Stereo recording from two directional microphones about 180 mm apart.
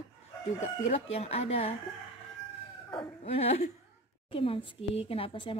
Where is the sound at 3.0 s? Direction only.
35° left (ahead or behind).